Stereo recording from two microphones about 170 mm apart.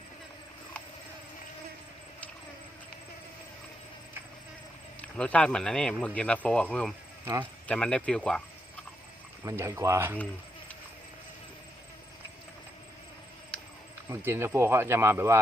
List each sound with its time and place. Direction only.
4.9 s speech: 5° left (ahead or behind)
9.4 s speech: 15° right (ahead or behind)
14.1 s speech: 15° right (ahead or behind)